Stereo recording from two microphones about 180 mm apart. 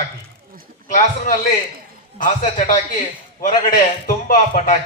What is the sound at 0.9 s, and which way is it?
A man's voice, 45° left (ahead or behind).